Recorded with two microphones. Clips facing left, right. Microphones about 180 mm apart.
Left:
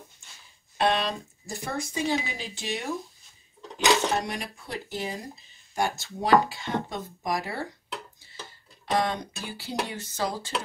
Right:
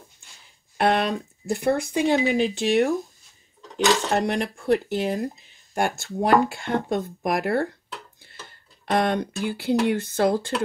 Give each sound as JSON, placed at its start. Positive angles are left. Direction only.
{"t": 0.7, "sound": "speech", "side_deg": -60}
{"t": 4.1, "sound": "speech", "side_deg": -60}